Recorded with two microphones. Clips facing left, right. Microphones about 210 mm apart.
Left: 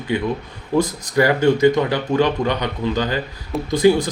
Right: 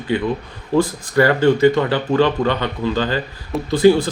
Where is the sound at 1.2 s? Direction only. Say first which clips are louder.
Right 1 dB; 10° left (ahead or behind).